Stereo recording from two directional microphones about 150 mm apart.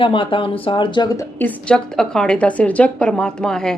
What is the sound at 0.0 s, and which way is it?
Speech, 35° left (ahead or behind).